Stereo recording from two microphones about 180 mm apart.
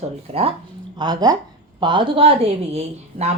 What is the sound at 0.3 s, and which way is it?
Speech, 35° right (ahead or behind).